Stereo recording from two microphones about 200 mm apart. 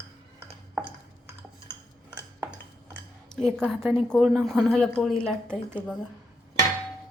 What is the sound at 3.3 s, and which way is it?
A woman's voice, 5° left (ahead or behind).